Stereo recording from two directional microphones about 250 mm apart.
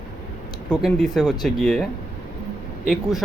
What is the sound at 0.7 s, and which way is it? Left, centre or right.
Speech, centre.